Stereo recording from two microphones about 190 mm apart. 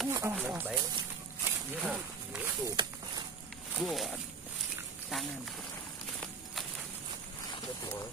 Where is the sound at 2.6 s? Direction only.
20° right (ahead or behind).